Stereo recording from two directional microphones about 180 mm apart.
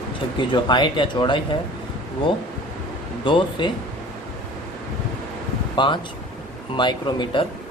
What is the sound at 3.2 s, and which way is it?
Speech, 25° left (ahead or behind).